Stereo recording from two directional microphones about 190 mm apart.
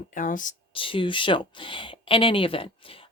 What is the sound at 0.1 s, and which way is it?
Speech, 45° left (ahead or behind).